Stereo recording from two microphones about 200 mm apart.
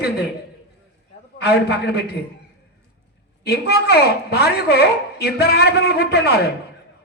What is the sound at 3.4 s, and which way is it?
A woman's voice, 55° left (ahead or behind).